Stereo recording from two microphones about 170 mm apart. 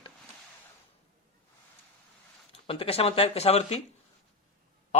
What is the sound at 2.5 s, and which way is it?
Speech, 35° left (ahead or behind).